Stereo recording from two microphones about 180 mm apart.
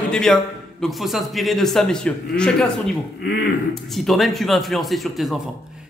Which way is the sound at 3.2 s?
60° left (ahead or behind).